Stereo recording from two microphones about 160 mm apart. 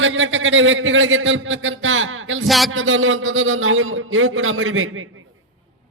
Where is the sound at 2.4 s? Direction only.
Centre (ahead or behind).